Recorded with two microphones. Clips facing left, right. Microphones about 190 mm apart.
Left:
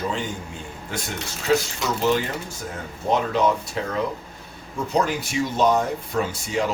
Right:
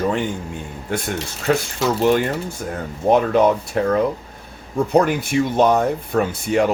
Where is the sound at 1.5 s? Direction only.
55° right (ahead or behind).